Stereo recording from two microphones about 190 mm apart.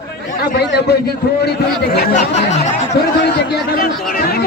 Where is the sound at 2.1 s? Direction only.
35° left (ahead or behind).